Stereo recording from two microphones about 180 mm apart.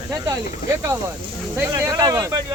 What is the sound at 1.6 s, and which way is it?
Speech, 15° right (ahead or behind).